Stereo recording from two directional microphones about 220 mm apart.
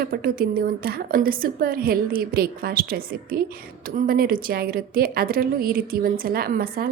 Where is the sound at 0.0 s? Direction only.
40° right (ahead or behind).